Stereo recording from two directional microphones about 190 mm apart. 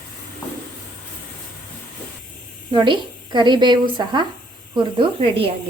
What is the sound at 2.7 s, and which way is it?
A woman's voice, 25° right (ahead or behind).